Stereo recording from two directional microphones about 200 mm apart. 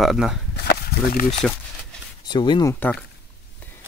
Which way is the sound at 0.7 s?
50° left (ahead or behind).